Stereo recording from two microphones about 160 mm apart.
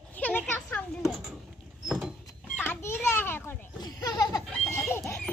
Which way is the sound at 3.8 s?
20° left (ahead or behind).